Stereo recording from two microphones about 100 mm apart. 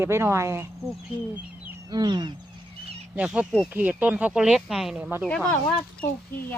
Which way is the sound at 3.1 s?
10° right (ahead or behind).